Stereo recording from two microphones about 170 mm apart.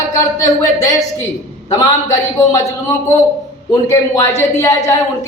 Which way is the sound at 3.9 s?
15° left (ahead or behind).